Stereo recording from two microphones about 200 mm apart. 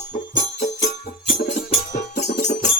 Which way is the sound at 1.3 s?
30° left (ahead or behind).